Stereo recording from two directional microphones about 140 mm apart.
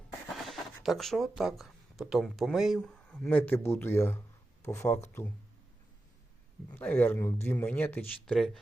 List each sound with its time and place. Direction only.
0.3 s a sound: centre (ahead or behind)
1.4 s speech: centre (ahead or behind); by 4.9 s 20° left (ahead or behind)
6.7 s speech: 10° left (ahead or behind)